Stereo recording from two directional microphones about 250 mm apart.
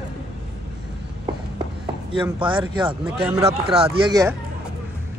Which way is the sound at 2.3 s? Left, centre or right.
Centre.